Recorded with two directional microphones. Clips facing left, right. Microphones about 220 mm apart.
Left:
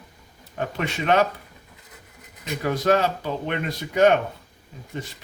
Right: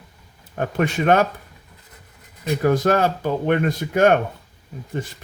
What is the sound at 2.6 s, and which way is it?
Speech, 50° right (ahead or behind).